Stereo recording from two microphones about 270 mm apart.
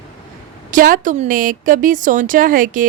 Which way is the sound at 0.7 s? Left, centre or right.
Right.